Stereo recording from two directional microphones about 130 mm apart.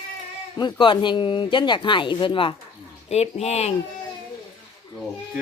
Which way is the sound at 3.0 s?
55° left (ahead or behind).